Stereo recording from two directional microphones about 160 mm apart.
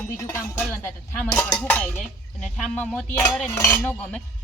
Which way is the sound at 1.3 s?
5° left (ahead or behind).